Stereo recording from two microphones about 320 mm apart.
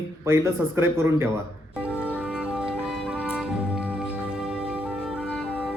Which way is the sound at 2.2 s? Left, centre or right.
Centre.